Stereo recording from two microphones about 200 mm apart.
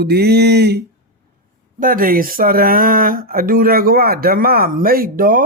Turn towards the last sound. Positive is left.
turn(degrees=-45)  # may be behind; listen again after turning